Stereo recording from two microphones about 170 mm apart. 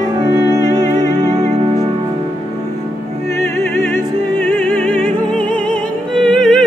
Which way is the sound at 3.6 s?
15° left (ahead or behind).